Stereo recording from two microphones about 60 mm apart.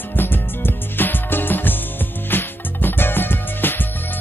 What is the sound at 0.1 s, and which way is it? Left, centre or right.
Music, left.